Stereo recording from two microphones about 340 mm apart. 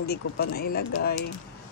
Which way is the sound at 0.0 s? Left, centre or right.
Left.